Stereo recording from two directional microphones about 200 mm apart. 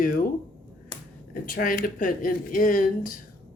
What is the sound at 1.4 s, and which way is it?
A woman's voice, 45° left (ahead or behind).